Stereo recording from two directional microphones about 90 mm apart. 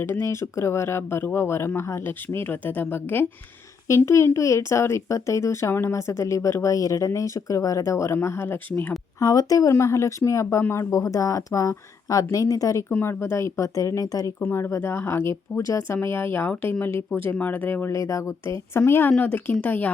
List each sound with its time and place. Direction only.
0.0 s speech: 25° left (ahead or behind)
9.2 s speech: 40° left (ahead or behind)
12.9 s speech: 25° left (ahead or behind)
14.4 s speech: 30° left (ahead or behind)
17.9 s speech: 35° left (ahead or behind); by 19.9 s 15° left (ahead or behind)